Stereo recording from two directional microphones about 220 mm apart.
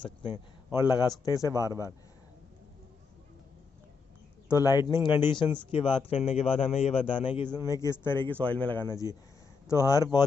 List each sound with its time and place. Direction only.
0.0 s a man's voice: 20° left (ahead or behind)
4.5 s a man's voice: 15° left (ahead or behind)